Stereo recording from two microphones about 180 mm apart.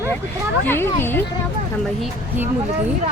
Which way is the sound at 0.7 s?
10° left (ahead or behind).